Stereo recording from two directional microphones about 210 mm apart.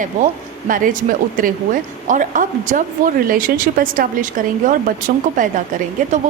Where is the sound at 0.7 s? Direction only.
40° right (ahead or behind).